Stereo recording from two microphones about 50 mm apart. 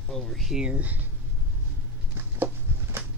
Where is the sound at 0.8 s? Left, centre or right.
Right.